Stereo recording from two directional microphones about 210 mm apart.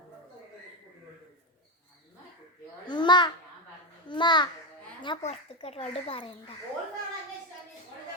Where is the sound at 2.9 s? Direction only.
20° left (ahead or behind).